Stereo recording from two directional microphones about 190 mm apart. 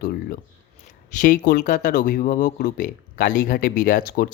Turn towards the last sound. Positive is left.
turn(degrees=50)  # may be behind; listen again after turning